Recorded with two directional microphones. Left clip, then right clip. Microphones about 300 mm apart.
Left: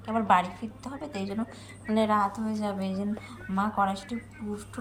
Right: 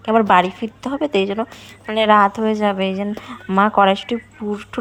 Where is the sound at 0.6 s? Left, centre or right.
Right.